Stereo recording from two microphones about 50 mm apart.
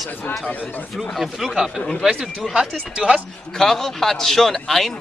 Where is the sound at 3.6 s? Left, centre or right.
Centre.